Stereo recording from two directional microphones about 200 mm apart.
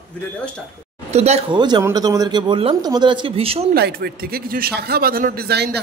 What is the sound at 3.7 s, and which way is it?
Speech, 50° right (ahead or behind).